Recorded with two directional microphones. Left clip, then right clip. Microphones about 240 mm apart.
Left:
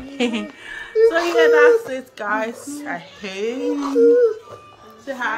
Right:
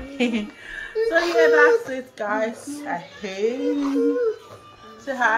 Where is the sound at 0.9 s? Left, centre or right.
Centre.